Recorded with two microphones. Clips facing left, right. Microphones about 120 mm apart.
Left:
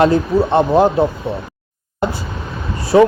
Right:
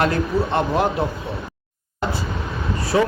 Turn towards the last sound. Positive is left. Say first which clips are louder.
# left 8 dB
turn(degrees=30)  # may be behind; listen again after turning